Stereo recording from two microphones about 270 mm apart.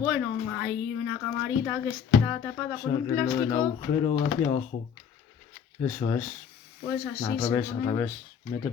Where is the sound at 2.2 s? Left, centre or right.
Centre.